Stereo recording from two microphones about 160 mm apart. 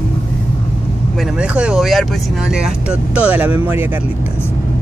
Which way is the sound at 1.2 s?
5° right (ahead or behind).